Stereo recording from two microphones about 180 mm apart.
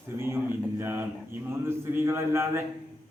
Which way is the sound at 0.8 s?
10° right (ahead or behind).